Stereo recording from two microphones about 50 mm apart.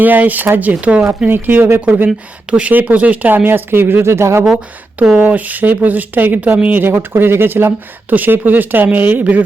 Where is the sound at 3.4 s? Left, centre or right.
Right.